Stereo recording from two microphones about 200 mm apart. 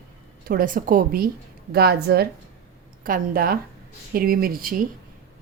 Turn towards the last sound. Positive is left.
turn(degrees=-45)  # may be behind; listen again after turning